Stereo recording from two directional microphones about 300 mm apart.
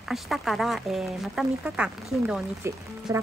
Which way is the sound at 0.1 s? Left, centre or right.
Centre.